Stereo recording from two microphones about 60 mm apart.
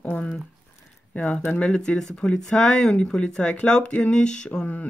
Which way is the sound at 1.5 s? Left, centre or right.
Centre.